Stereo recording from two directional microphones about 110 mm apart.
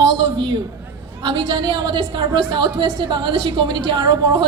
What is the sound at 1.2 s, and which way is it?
A woman's voice, 40° right (ahead or behind).